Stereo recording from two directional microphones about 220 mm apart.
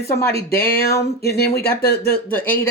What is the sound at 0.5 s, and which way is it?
Speech, 45° left (ahead or behind).